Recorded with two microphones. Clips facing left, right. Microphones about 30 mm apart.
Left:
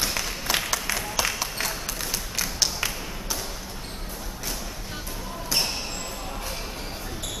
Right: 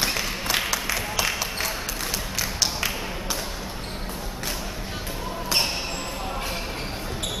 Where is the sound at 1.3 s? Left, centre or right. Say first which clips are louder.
Right 2 dB; centre.